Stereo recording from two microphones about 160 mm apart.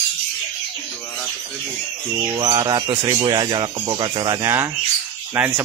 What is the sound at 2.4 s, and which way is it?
Speech, 25° right (ahead or behind).